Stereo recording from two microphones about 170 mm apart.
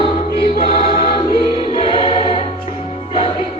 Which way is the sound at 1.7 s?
30° left (ahead or behind).